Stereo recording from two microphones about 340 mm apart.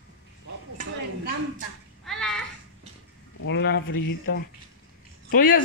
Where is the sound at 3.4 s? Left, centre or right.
Left.